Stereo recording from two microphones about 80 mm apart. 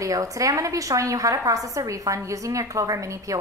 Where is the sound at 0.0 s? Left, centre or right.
Right.